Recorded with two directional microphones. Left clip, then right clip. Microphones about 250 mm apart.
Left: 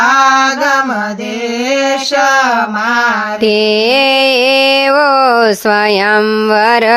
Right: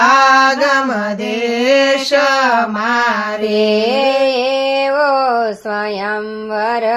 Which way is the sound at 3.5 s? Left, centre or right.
Left.